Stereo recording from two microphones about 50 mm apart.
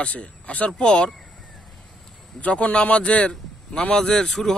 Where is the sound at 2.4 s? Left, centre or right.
Left.